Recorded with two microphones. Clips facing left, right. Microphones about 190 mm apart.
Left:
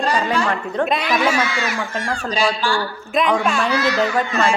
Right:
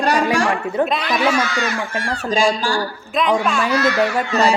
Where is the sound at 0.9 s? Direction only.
Centre (ahead or behind).